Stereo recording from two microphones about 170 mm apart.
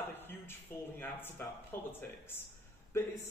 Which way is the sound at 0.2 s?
10° left (ahead or behind).